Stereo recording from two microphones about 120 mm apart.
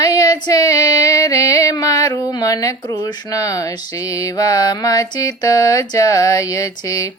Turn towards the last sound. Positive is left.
turn(degrees=30)  # may be behind; listen again after turning